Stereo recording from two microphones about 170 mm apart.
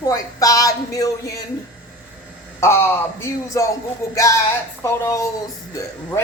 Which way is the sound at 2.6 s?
15° left (ahead or behind).